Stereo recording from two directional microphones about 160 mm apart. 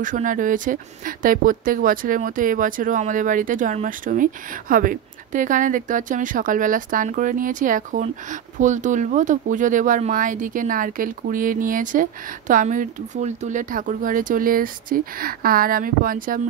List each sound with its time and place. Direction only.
0.0 s speech: 55° right (ahead or behind)